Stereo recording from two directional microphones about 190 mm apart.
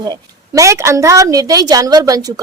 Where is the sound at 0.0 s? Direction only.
20° right (ahead or behind).